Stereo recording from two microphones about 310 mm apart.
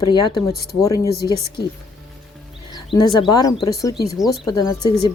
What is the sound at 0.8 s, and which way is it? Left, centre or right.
Speech, centre.